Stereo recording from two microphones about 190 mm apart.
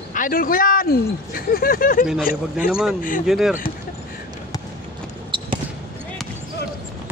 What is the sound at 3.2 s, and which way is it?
Speech, centre (ahead or behind).